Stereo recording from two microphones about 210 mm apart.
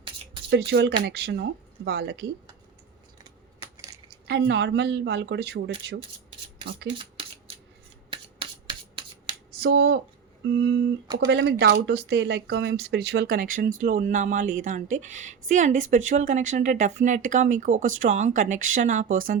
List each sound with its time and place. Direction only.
0.7 s speech: 55° right (ahead or behind)
4.3 s a woman's voice: 55° right (ahead or behind)
6.8 s a sound: 25° right (ahead or behind)
9.5 s a woman's voice: 50° right (ahead or behind)